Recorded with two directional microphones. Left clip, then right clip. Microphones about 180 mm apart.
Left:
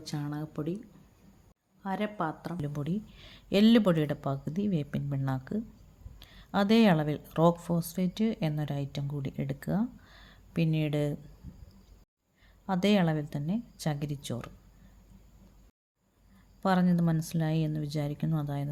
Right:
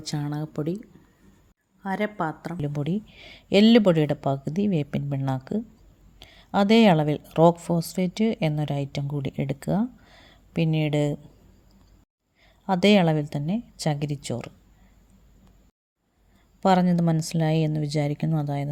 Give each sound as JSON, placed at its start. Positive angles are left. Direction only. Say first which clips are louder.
{"t": 0.0, "sound": "speech", "louder": "right 6 dB", "side_deg": -35}
{"t": 12.6, "sound": "speech", "louder": "right 8 dB", "side_deg": -35}
{"t": 16.6, "sound": "speech", "louder": "right 8 dB", "side_deg": -35}